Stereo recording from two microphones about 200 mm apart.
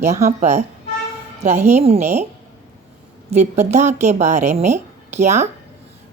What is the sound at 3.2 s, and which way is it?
Speech, 35° right (ahead or behind).